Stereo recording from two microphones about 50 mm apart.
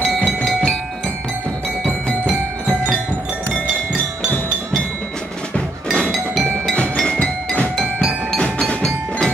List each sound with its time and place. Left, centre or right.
0.0 s music: centre
7.0 s music: centre
8.4 s percussion: centre